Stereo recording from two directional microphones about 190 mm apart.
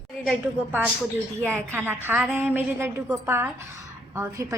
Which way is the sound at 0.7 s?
10° right (ahead or behind).